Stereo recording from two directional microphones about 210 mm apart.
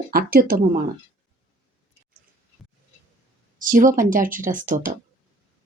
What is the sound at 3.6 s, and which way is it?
Speech, 40° right (ahead or behind).